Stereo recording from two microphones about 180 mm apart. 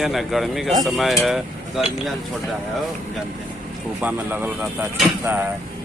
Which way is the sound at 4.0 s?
10° right (ahead or behind).